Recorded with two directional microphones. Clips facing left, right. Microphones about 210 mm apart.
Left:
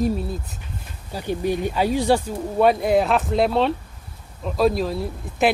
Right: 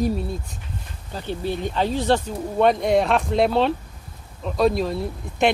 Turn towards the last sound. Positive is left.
turn(degrees=0)  # may be behind; listen again after turning